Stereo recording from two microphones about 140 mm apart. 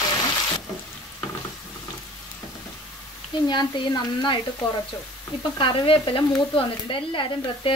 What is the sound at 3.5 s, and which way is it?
Speech, 30° left (ahead or behind).